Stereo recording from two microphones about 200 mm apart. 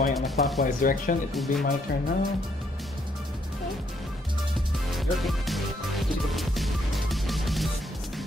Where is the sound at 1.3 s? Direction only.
Centre (ahead or behind).